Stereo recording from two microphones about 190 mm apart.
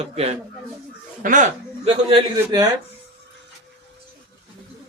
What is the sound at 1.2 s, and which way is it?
Speech, 45° right (ahead or behind).